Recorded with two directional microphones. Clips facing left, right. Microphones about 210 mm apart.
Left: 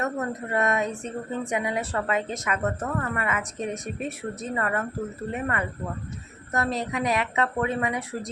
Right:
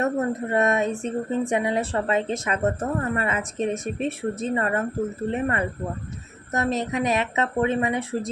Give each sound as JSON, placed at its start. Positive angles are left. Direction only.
{"t": 0.0, "sound": "speech", "side_deg": -25}